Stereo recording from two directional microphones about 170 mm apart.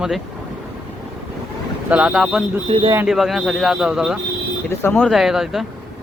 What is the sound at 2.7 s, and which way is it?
Speech, 35° right (ahead or behind).